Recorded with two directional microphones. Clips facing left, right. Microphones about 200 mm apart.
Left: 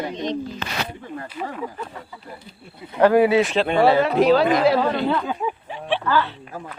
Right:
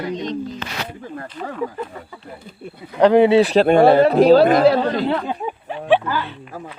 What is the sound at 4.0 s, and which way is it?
Speech, 35° right (ahead or behind).